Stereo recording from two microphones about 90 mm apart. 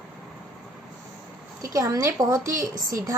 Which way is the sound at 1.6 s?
40° right (ahead or behind).